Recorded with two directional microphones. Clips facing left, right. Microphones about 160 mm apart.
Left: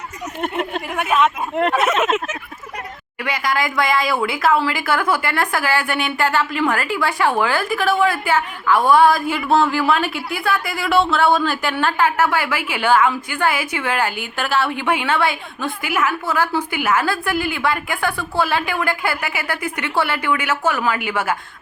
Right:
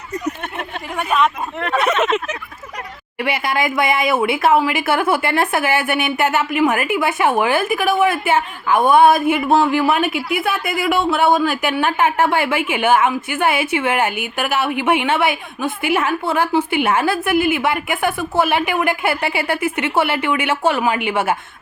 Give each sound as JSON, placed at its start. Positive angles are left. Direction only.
{"t": 0.9, "sound": "a woman's voice", "side_deg": 5}
{"t": 3.2, "sound": "a woman's voice", "side_deg": -25}